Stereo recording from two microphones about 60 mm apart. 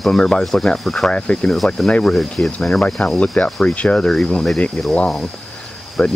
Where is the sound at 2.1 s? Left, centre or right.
Centre.